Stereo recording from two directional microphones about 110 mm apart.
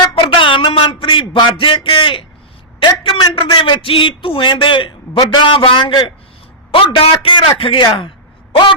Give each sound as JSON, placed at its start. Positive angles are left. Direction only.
{"t": 0.0, "sound": "a sound", "side_deg": 50}
{"t": 2.8, "sound": "a man's voice", "side_deg": 50}
{"t": 6.7, "sound": "a man's voice", "side_deg": 55}